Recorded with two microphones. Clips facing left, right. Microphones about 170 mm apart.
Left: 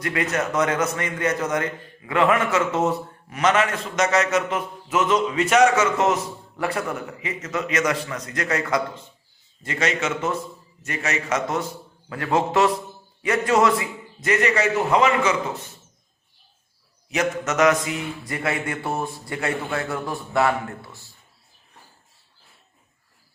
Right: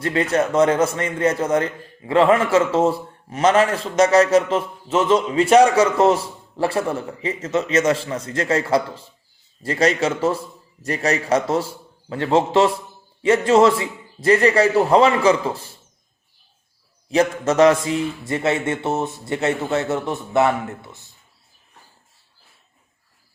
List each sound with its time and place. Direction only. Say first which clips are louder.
0.0 s a man's voice: right 5 dB; 30° right (ahead or behind)
17.1 s a man's voice: right 6 dB; 30° right (ahead or behind)